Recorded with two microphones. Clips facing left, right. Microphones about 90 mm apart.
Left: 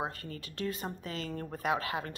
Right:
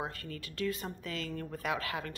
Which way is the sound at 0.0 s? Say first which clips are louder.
Left 2 dB; 25° left (ahead or behind).